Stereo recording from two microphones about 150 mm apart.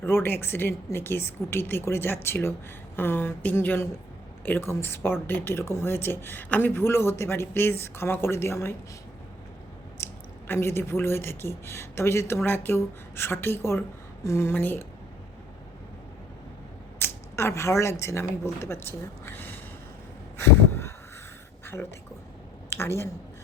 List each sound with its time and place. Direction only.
0.0 s a woman's voice: 15° left (ahead or behind)
10.0 s a woman's voice: 15° left (ahead or behind)
17.0 s speech: 15° left (ahead or behind)
20.4 s a sound: 15° left (ahead or behind)